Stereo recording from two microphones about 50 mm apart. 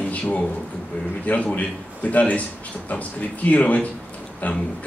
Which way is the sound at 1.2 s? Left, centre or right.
Left.